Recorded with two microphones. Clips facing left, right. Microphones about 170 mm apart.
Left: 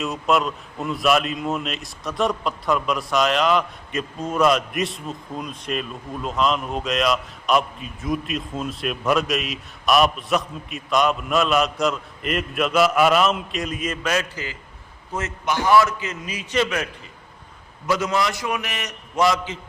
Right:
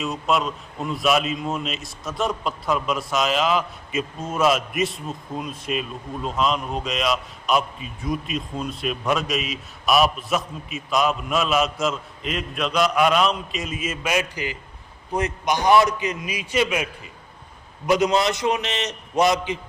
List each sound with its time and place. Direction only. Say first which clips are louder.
0.0 s a man's voice: left 2 dB; centre (ahead or behind); by 19.5 s 20° right (ahead or behind)